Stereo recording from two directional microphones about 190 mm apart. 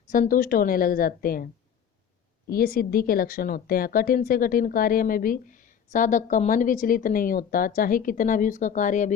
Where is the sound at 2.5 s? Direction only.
50° left (ahead or behind).